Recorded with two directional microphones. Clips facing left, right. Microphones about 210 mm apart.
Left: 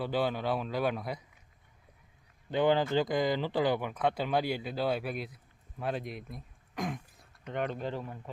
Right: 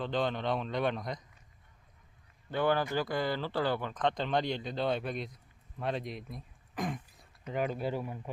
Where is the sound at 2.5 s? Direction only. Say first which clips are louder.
Left 3 dB; 20° left (ahead or behind); by 8.1 s 10° right (ahead or behind).